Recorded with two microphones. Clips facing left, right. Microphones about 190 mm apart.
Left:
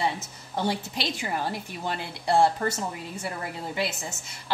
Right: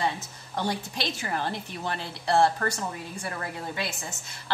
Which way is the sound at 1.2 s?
10° left (ahead or behind).